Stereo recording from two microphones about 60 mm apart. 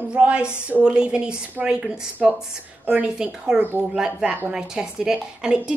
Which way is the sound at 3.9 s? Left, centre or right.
Centre.